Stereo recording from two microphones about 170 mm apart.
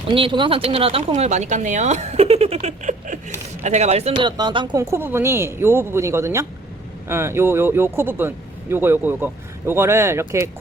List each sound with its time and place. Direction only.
0.1 s speech: 30° right (ahead or behind)
4.3 s speech: 25° right (ahead or behind)